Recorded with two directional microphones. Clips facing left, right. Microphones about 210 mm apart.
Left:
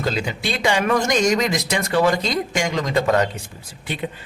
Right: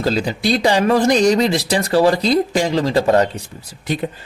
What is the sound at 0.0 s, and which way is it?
Speech, 35° right (ahead or behind).